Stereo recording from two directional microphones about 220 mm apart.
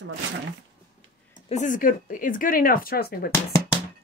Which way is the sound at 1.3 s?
35° left (ahead or behind).